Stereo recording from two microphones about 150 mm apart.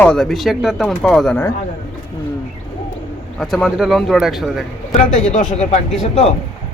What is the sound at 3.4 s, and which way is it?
Speech, centre (ahead or behind).